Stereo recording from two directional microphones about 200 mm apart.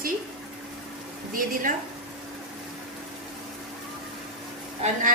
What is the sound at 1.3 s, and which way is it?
Speech, 45° right (ahead or behind).